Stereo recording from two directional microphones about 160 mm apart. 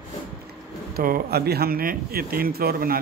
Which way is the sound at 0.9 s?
70° right (ahead or behind).